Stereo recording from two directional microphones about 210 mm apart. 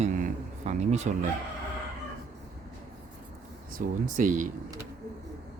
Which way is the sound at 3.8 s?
35° right (ahead or behind).